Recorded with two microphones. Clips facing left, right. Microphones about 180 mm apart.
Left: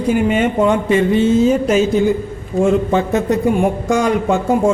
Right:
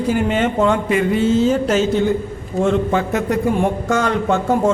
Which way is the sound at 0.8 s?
25° left (ahead or behind).